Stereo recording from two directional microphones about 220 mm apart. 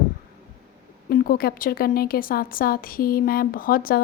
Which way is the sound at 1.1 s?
45° left (ahead or behind).